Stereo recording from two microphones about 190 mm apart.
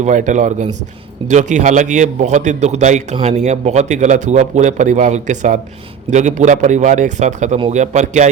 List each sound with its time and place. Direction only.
0.0 s a man's voice: 40° right (ahead or behind)